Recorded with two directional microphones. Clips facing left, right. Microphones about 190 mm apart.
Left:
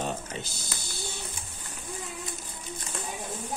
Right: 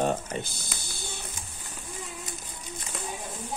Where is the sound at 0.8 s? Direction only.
55° right (ahead or behind).